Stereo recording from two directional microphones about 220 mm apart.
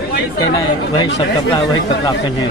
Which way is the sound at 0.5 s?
20° left (ahead or behind).